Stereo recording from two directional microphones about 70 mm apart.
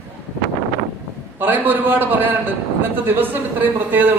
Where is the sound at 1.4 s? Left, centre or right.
Right.